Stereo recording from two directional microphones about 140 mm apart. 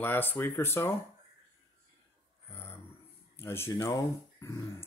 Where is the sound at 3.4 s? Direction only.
20° left (ahead or behind).